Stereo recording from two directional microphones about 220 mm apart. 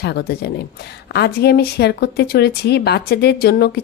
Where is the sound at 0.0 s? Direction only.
50° left (ahead or behind).